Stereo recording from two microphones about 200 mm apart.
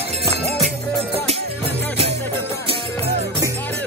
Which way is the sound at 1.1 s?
30° right (ahead or behind).